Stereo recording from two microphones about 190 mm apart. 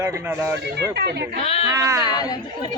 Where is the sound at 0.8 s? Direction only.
60° right (ahead or behind).